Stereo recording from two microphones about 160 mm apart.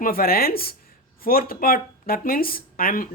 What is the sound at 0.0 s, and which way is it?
Speech, 65° left (ahead or behind).